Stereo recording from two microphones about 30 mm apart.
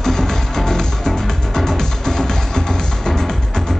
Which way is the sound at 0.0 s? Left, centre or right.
Centre.